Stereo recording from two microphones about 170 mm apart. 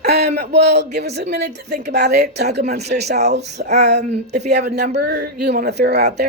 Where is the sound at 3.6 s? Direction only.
55° right (ahead or behind).